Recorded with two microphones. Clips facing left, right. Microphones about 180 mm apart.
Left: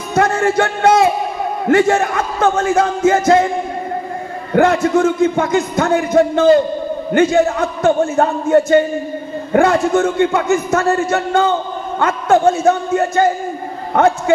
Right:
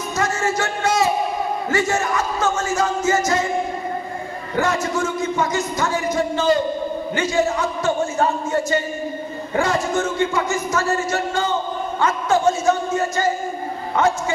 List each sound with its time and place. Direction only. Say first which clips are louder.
0.1 s music: left 8 dB; 60° left (ahead or behind)
1.7 s a man's voice: left 10 dB; 60° left (ahead or behind)
4.6 s a man's voice: left 9 dB; 55° left (ahead or behind)